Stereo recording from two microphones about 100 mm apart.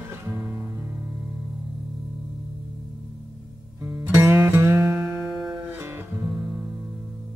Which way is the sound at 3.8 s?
20° right (ahead or behind).